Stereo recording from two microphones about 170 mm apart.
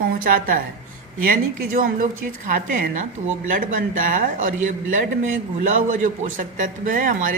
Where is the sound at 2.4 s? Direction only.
55° right (ahead or behind).